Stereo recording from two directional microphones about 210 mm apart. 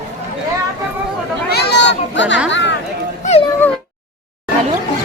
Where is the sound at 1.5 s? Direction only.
50° left (ahead or behind).